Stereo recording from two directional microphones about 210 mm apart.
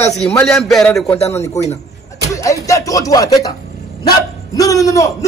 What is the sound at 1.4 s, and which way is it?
A man's voice, 15° left (ahead or behind).